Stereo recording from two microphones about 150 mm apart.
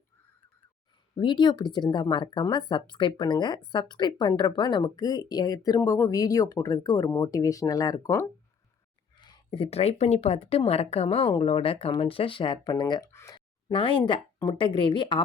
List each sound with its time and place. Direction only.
1.1 s speech: 30° left (ahead or behind)
9.2 s speech: 30° left (ahead or behind)